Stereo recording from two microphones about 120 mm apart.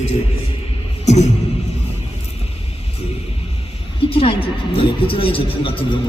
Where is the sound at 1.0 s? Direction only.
65° left (ahead or behind).